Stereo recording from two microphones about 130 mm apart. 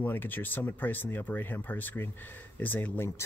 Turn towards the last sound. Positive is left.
turn(degrees=15)  # may be behind; listen again after turning